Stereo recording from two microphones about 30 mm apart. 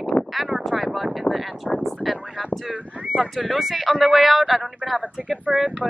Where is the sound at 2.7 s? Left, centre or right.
Right.